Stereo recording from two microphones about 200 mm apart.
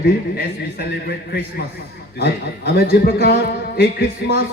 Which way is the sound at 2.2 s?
50° left (ahead or behind).